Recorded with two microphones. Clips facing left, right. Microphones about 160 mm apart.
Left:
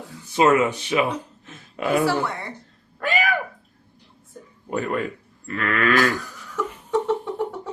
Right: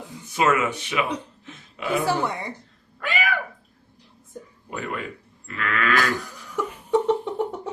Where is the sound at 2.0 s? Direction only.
20° right (ahead or behind).